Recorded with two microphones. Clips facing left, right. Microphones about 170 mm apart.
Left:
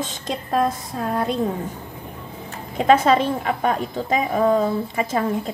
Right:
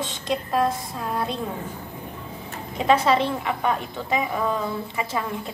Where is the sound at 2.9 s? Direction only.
50° left (ahead or behind).